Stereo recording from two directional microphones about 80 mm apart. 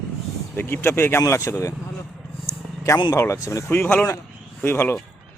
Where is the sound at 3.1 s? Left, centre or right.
Left.